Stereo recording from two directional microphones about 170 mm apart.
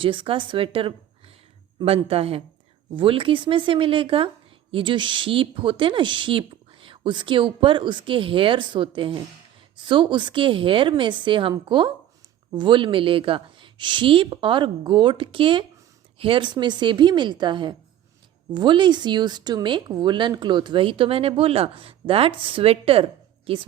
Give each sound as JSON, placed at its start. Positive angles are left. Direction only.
{"t": 0.0, "sound": "a woman's voice", "side_deg": -30}